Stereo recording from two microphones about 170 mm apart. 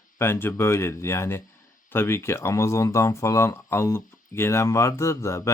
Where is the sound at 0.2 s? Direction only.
15° left (ahead or behind).